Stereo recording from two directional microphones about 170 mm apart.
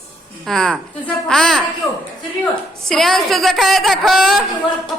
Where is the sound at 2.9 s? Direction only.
Centre (ahead or behind).